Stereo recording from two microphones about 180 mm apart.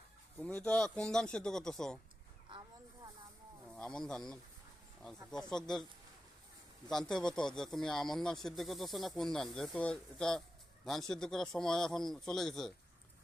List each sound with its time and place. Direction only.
0.3 s a man's voice: 5° left (ahead or behind)
3.7 s a man's voice: 5° left (ahead or behind)
6.8 s a man's voice: 5° left (ahead or behind)